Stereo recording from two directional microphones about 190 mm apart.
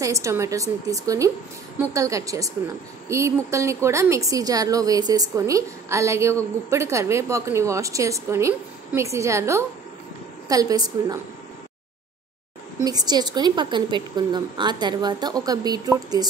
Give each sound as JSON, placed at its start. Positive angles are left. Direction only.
{"t": 0.0, "sound": "a woman's voice", "side_deg": -15}
{"t": 12.8, "sound": "a woman's voice", "side_deg": -20}